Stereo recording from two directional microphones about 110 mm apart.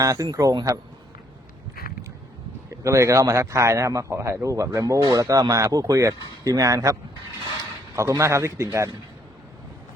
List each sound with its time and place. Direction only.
0.0 s a man's voice: 35° right (ahead or behind)
2.6 s speech: 25° right (ahead or behind)
7.9 s speech: 25° right (ahead or behind)